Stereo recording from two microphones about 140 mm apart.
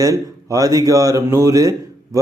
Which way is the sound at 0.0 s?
25° right (ahead or behind).